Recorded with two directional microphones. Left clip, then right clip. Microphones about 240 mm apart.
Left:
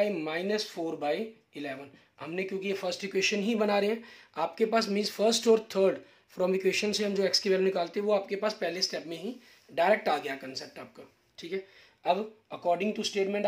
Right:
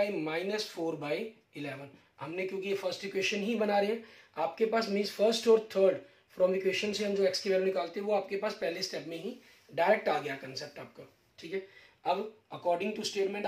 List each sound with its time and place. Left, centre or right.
0.2 s speech: left
12.0 s speech: left